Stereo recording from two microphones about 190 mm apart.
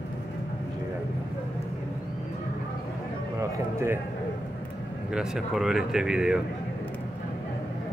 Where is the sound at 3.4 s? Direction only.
15° right (ahead or behind).